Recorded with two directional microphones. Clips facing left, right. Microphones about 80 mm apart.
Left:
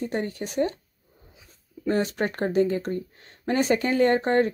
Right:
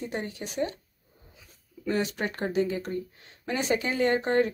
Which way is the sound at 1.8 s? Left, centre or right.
Left.